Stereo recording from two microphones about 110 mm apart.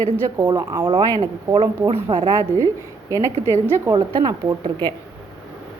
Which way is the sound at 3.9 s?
35° right (ahead or behind).